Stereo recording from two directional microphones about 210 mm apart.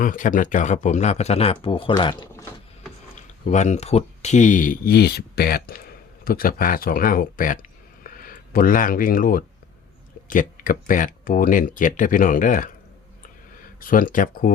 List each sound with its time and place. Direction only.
0.0 s speech: 40° left (ahead or behind); by 2.9 s 10° left (ahead or behind)
3.2 s speech: 35° left (ahead or behind)
13.7 s speech: 40° left (ahead or behind)